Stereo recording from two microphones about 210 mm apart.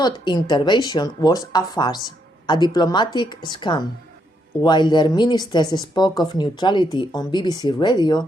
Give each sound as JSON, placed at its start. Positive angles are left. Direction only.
{"t": 0.0, "sound": "speech", "side_deg": 20}